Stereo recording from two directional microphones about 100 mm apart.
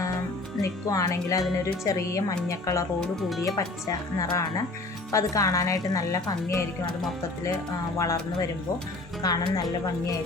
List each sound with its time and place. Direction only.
0.6 s a woman's voice: 35° left (ahead or behind)
3.2 s speech: centre (ahead or behind)
3.4 s a woman's voice: 35° left (ahead or behind)
7.9 s a woman's voice: 30° left (ahead or behind)